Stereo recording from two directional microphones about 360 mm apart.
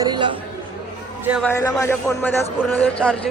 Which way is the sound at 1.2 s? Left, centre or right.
Centre.